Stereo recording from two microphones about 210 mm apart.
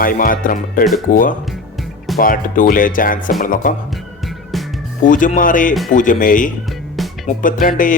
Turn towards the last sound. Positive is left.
turn(degrees=40)  # may be behind; listen again after turning